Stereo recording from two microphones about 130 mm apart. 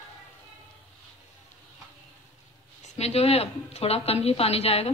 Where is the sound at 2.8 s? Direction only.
55° left (ahead or behind).